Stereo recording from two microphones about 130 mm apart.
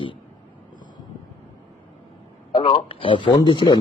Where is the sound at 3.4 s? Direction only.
35° left (ahead or behind).